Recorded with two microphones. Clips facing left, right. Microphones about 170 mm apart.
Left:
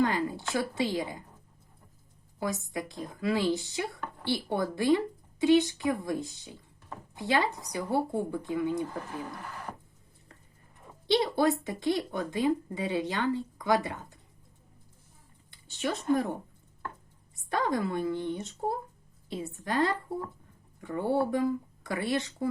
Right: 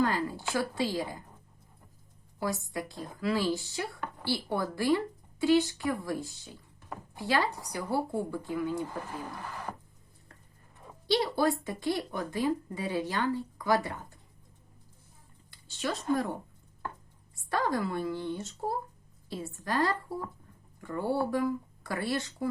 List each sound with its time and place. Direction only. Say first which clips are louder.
0.0 s speech: left 1 dB; 20° left (ahead or behind)
2.4 s speech: even; 20° left (ahead or behind)
11.0 s speech: left 2 dB; 20° left (ahead or behind)
15.4 s speech: left 2 dB; 20° left (ahead or behind)
17.3 s speech: left 1 dB; 20° left (ahead or behind)